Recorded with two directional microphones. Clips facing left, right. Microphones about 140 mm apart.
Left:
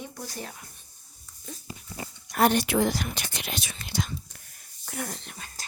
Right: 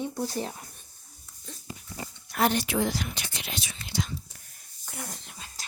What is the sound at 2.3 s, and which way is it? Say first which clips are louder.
Speech: left 3 dB; 50° left (ahead or behind).